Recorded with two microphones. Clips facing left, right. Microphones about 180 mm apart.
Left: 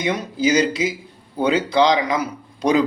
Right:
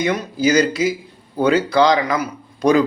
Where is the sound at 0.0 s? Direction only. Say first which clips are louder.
Right 2 dB; 20° left (ahead or behind).